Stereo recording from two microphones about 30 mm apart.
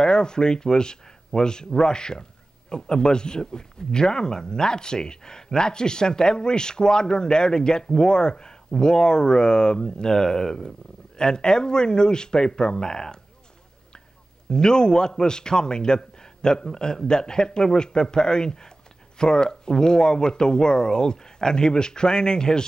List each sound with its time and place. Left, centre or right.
0.0 s speech: left
14.5 s speech: left